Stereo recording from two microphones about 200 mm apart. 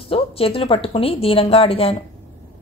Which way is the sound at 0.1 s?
30° left (ahead or behind).